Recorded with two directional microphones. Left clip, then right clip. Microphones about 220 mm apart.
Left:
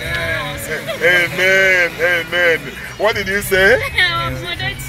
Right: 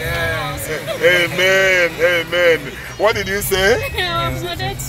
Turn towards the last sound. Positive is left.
turn(degrees=-20)  # may be behind; listen again after turning